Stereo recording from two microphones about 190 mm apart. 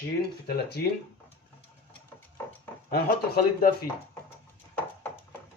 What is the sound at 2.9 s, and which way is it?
Speech, 55° left (ahead or behind).